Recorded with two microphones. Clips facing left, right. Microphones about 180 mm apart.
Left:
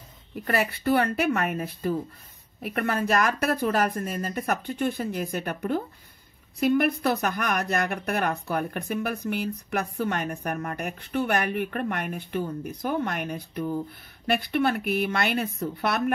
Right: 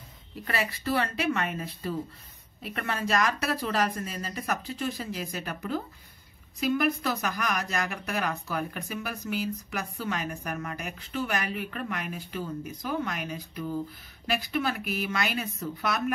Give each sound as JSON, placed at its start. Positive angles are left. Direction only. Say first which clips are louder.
{"t": 0.3, "sound": "speech", "louder": "left 5 dB", "side_deg": 60}
{"t": 10.3, "sound": "speech", "louder": "left 4 dB", "side_deg": 45}